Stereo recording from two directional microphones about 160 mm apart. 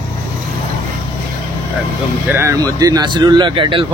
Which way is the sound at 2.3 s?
15° right (ahead or behind).